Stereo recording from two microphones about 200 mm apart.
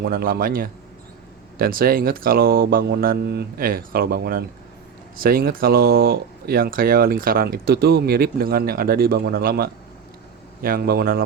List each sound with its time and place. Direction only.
0.0 s speech: 50° right (ahead or behind)